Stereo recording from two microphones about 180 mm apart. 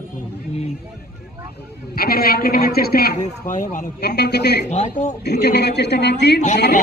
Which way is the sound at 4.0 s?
65° left (ahead or behind).